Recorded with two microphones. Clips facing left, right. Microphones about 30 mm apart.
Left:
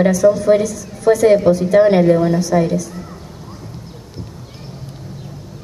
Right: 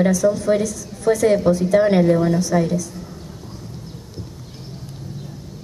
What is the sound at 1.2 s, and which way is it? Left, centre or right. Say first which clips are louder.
A woman's voice: left 4 dB; centre.